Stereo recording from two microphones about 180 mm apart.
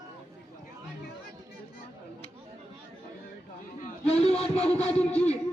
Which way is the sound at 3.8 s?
35° left (ahead or behind).